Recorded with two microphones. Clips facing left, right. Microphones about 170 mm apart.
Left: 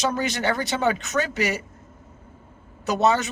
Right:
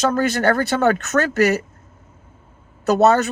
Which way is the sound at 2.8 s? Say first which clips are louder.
Right 6 dB; 60° right (ahead or behind).